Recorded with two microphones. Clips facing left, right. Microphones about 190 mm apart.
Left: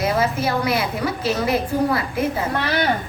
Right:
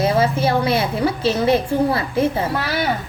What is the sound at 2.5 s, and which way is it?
Speech, 5° right (ahead or behind).